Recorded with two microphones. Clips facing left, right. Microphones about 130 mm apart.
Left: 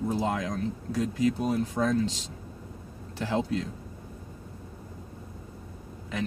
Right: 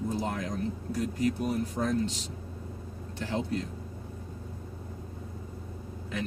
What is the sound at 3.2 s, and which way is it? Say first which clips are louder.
Speech: left 3 dB; 90° left.